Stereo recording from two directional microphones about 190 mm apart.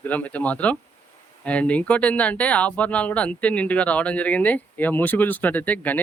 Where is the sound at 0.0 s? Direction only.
10° left (ahead or behind).